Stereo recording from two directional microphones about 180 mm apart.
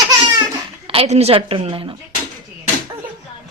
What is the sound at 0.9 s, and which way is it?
Speech, 35° right (ahead or behind).